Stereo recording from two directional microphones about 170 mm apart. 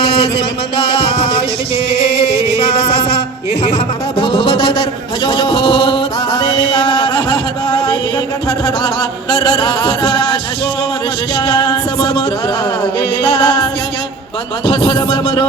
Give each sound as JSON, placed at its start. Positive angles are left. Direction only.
{"t": 0.0, "sound": "music", "side_deg": 35}
{"t": 4.2, "sound": "a sound", "side_deg": 30}
{"t": 8.4, "sound": "music", "side_deg": 25}
{"t": 11.3, "sound": "music", "side_deg": 30}
{"t": 14.7, "sound": "music", "side_deg": 25}